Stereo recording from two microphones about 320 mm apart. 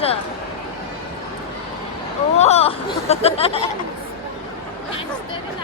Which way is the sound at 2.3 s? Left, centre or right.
Centre.